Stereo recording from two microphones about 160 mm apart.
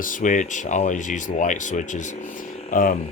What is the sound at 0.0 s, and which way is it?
Speech, 55° left (ahead or behind).